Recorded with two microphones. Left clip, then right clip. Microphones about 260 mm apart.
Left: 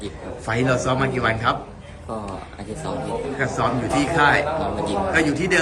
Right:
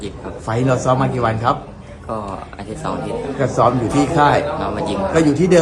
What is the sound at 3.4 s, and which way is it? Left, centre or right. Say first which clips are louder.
Speech: right 8 dB; centre.